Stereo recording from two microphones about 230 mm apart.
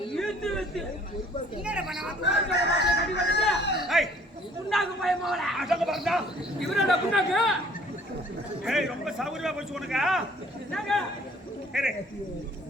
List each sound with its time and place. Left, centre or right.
0.2 s chatter: centre
1.6 s a man's voice: centre
2.2 s speech: left
3.4 s a sound: centre
4.7 s a man's voice: centre
8.6 s a man's voice: centre